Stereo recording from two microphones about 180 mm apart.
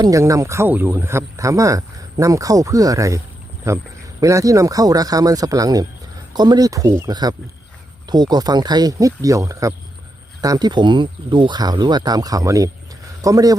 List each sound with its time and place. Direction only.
0.0 s speech: 20° right (ahead or behind)